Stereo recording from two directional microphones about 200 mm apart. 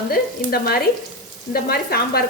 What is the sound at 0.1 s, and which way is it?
Speech, 50° left (ahead or behind).